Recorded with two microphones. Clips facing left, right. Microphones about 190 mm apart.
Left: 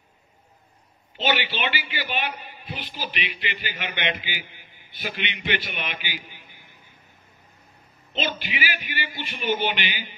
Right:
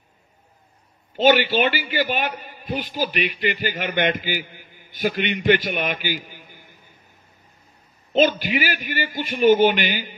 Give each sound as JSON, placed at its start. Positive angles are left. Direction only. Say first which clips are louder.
{"t": 1.1, "sound": "a man's voice", "louder": "right 9 dB", "side_deg": -45}
{"t": 8.1, "sound": "a man's voice", "louder": "right 11 dB", "side_deg": -45}